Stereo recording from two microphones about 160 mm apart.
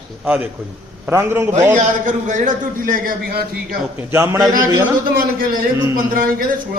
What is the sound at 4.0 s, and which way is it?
Speech, 15° right (ahead or behind).